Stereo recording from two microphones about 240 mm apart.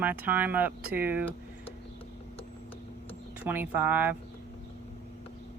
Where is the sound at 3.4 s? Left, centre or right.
Centre.